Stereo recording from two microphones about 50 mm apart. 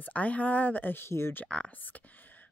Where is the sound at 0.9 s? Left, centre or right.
Left.